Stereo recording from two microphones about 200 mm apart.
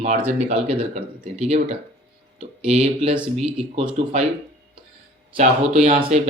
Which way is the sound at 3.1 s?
5° right (ahead or behind).